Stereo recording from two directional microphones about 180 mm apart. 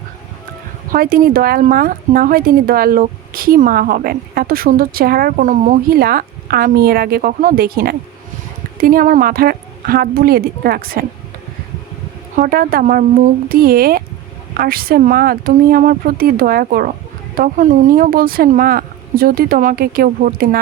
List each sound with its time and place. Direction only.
0.9 s speech: 55° right (ahead or behind)
12.4 s speech: 55° right (ahead or behind)